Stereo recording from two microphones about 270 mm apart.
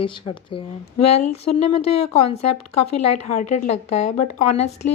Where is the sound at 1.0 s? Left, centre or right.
Left.